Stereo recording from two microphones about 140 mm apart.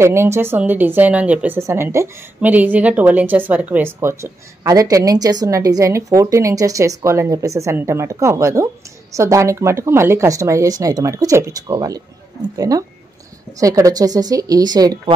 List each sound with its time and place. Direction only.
0.0 s a woman's voice: 20° right (ahead or behind)